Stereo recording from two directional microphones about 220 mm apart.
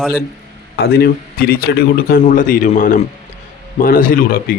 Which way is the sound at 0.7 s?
45° left (ahead or behind).